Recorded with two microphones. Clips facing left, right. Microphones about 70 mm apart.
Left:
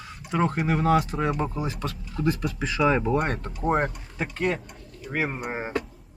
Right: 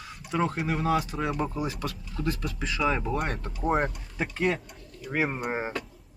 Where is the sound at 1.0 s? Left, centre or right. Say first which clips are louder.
Left 4 dB; centre.